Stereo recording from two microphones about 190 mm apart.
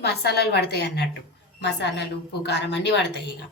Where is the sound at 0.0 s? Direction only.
60° left (ahead or behind).